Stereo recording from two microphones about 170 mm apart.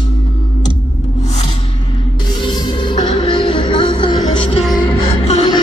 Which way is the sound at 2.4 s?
30° left (ahead or behind).